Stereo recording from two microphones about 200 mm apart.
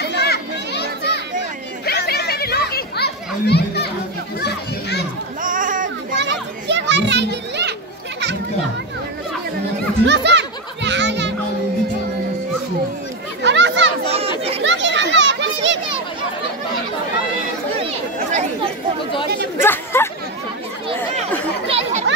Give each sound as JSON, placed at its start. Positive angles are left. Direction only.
{"t": 0.0, "sound": "children playing", "side_deg": 55}
{"t": 5.4, "sound": "a sound", "side_deg": -40}
{"t": 6.1, "sound": "children playing", "side_deg": -60}
{"t": 10.0, "sound": "music", "side_deg": -60}
{"t": 13.4, "sound": "chatter", "side_deg": -65}
{"t": 14.0, "sound": "chatter", "side_deg": -30}
{"t": 14.6, "sound": "children playing", "side_deg": -65}
{"t": 19.6, "sound": "chatter", "side_deg": 10}
{"t": 21.6, "sound": "chatter", "side_deg": -30}